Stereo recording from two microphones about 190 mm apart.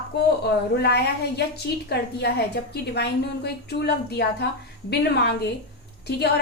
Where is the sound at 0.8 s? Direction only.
60° left (ahead or behind).